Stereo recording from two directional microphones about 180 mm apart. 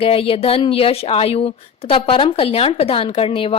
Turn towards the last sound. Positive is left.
turn(degrees=30)  # may be behind; listen again after turning